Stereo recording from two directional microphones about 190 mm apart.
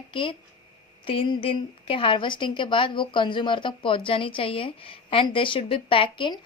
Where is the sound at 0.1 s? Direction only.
25° left (ahead or behind).